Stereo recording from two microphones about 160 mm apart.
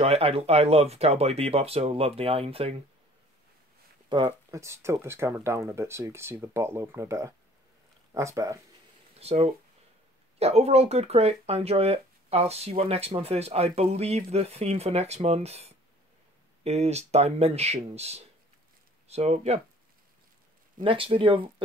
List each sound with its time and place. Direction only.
0.0 s speech: 40° right (ahead or behind)
4.1 s speech: 30° right (ahead or behind)
4.6 s speech: 15° right (ahead or behind)
9.2 s speech: 40° right (ahead or behind)
20.8 s speech: 35° right (ahead or behind)